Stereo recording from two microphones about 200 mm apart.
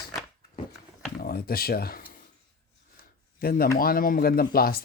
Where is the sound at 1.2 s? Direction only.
50° left (ahead or behind).